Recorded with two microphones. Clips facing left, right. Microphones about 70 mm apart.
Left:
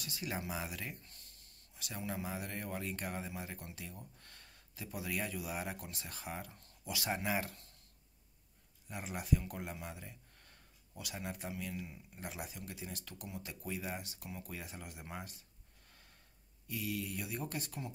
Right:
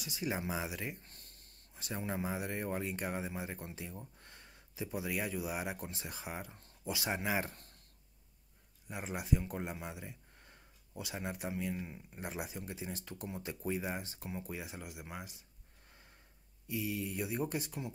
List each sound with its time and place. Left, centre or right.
0.0 s a man's voice: centre
1.0 s a man's voice: right; by 6.6 s centre
6.6 s a sound: right
7.1 s a man's voice: centre
8.9 s a man's voice: centre
16.6 s a man's voice: centre